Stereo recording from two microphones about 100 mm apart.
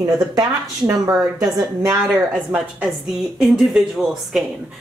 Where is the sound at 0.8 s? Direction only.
35° right (ahead or behind).